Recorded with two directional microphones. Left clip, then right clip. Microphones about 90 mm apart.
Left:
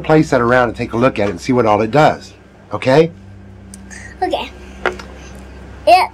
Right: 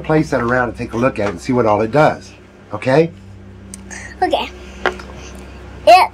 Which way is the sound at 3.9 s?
10° right (ahead or behind).